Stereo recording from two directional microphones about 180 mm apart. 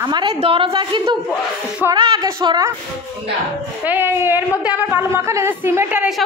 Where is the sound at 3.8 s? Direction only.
10° right (ahead or behind).